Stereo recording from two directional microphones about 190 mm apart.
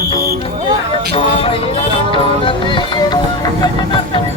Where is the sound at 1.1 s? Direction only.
30° left (ahead or behind).